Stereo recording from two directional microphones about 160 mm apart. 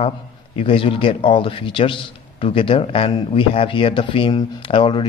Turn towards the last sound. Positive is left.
turn(degrees=30)  # may be behind; listen again after turning